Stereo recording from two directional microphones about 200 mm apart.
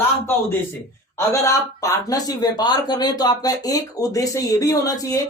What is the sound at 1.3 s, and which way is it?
Speech, 15° left (ahead or behind).